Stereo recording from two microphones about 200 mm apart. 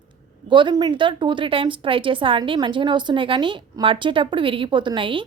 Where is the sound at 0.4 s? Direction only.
25° right (ahead or behind).